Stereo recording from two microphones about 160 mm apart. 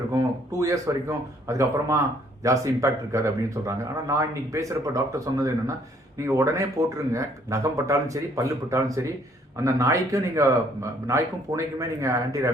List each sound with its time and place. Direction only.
0.1 s speech: 20° right (ahead or behind)